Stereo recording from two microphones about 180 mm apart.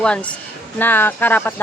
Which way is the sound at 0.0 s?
5° left (ahead or behind).